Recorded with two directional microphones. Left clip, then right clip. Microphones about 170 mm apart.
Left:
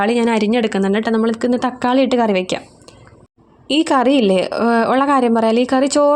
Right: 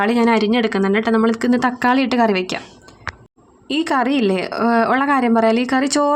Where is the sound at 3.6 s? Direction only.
40° left (ahead or behind).